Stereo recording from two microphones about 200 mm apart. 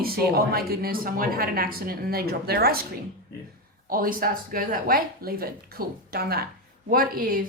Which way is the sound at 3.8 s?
45° right (ahead or behind).